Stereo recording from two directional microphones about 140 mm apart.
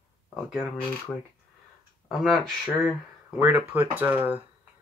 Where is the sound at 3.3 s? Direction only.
10° right (ahead or behind).